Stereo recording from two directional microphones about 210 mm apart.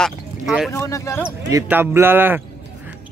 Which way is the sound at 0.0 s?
Centre (ahead or behind).